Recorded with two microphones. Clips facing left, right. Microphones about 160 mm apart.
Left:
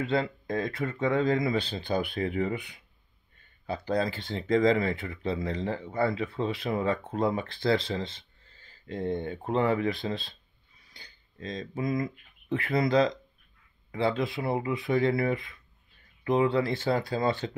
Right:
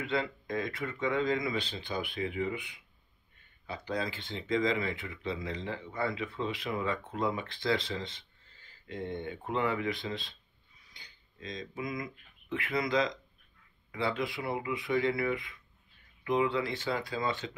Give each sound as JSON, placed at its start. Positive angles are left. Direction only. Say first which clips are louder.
{"t": 0.0, "sound": "speech", "louder": "left 5 dB", "side_deg": 35}